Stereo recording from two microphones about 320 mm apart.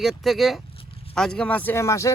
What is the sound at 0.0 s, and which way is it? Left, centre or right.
Speech, centre.